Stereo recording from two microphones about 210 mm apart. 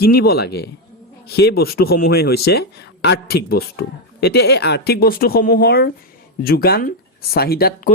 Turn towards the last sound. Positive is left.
turn(degrees=45)  # may be behind; listen again after turning